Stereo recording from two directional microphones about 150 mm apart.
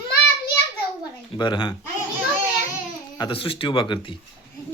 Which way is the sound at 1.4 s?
30° left (ahead or behind).